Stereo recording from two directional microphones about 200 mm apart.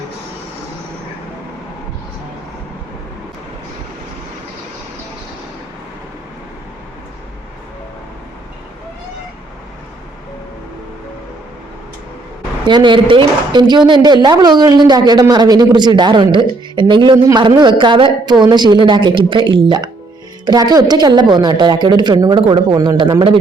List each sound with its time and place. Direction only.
12.6 s a woman's voice: 25° right (ahead or behind)